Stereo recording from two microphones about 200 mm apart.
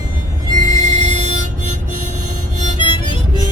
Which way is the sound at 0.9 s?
35° right (ahead or behind).